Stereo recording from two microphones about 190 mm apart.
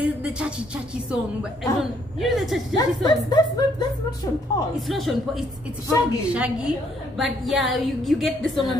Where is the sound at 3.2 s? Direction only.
20° left (ahead or behind).